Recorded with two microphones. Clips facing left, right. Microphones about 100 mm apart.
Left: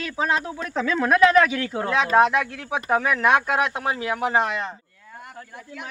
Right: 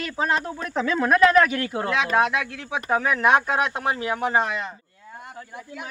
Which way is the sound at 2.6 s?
15° left (ahead or behind).